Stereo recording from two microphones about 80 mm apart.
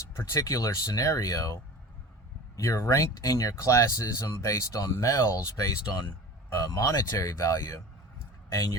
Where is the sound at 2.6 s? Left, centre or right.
Left.